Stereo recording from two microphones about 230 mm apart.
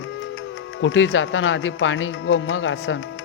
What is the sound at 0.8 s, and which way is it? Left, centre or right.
A man's voice, left.